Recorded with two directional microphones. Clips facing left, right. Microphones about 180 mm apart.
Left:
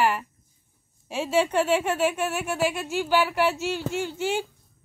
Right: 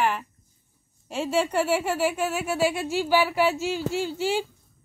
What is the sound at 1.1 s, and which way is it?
A woman's voice, centre (ahead or behind).